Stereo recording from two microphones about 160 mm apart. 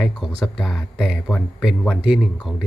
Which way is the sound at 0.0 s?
Centre (ahead or behind).